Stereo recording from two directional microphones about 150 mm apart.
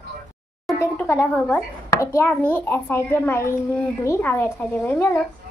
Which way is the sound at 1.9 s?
20° left (ahead or behind).